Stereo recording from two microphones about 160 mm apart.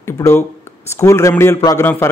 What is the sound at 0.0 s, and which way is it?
A man's voice, 15° left (ahead or behind).